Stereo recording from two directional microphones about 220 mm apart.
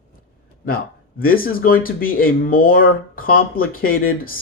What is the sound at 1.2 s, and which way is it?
Speech, 40° left (ahead or behind).